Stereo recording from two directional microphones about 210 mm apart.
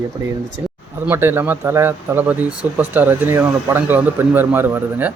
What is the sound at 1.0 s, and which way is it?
Speech, 10° right (ahead or behind).